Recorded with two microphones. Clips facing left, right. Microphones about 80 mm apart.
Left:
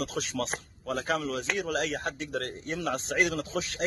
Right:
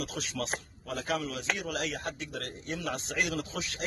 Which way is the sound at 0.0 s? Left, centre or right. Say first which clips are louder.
Left 4 dB; left.